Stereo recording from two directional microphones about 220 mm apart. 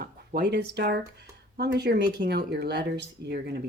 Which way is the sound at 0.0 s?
45° right (ahead or behind).